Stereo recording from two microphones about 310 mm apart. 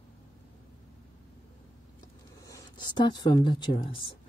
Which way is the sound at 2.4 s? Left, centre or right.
Centre.